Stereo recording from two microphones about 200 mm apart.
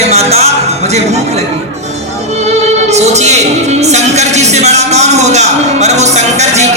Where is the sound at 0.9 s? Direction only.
35° right (ahead or behind).